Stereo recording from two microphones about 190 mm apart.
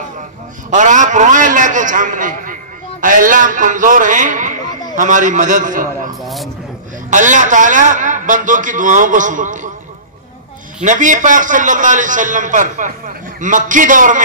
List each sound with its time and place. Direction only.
0.7 s a man's voice: 40° right (ahead or behind)
6.2 s a sound: centre (ahead or behind)
7.1 s a man's voice: 40° right (ahead or behind)
10.8 s a man's voice: 40° right (ahead or behind)